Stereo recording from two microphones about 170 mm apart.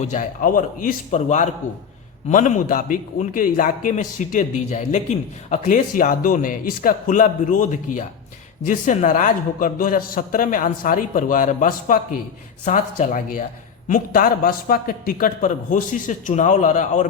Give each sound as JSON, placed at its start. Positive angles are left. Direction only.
{"t": 0.0, "sound": "a man's voice", "side_deg": 50}